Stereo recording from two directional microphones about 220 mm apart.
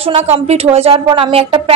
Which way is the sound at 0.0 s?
30° right (ahead or behind).